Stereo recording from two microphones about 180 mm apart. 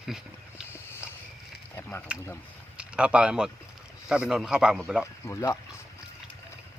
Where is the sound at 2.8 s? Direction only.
5° right (ahead or behind).